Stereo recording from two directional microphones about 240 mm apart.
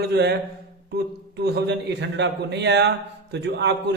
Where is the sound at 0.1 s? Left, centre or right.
Right.